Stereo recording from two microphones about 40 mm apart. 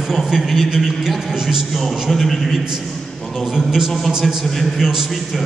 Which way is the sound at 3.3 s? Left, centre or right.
Centre.